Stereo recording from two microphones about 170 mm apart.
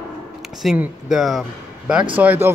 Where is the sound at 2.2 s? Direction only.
10° right (ahead or behind).